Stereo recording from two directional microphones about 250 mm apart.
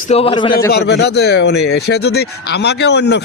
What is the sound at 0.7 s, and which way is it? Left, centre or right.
Speech, left.